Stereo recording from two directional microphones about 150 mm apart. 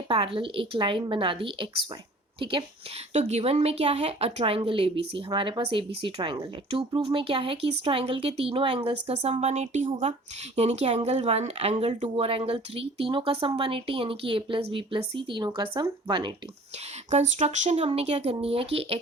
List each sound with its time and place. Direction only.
0.1 s speech: 40° right (ahead or behind)
3.1 s speech: 45° right (ahead or behind)
12.0 s speech: 40° right (ahead or behind)
17.1 s speech: 50° right (ahead or behind)